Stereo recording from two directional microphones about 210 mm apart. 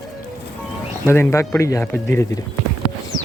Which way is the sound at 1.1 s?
15° left (ahead or behind).